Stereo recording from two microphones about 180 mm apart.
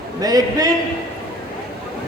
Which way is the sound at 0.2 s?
20° right (ahead or behind).